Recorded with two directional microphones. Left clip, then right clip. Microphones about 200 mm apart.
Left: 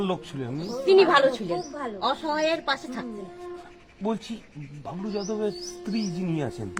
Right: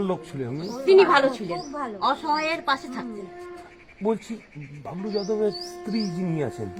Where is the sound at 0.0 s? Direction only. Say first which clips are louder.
Right 1 dB; 40° right (ahead or behind).